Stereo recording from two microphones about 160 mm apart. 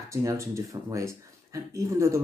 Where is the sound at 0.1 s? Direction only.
20° right (ahead or behind).